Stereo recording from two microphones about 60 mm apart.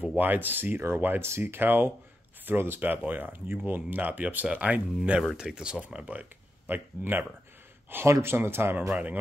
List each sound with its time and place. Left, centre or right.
0.0 s speech: right
6.7 s speech: right
7.9 s speech: right
8.9 s speech: right